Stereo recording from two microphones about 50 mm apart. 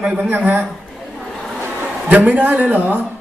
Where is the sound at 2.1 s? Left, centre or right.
Right.